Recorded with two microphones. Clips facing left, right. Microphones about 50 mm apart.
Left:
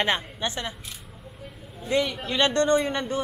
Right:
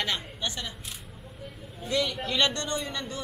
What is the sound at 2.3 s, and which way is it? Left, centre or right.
Speech, left.